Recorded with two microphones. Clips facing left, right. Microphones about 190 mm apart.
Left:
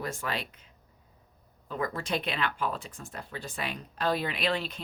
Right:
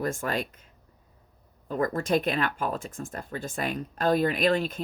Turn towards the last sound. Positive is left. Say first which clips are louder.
# right 6 dB
turn(degrees=-45)  # may be behind; listen again after turning